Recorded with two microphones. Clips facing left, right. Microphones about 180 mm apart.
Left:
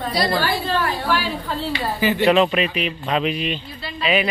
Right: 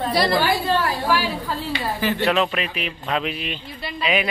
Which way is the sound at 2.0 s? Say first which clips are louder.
Left 5 dB; centre (ahead or behind).